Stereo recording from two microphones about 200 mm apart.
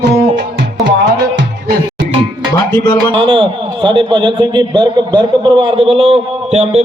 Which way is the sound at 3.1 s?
25° right (ahead or behind).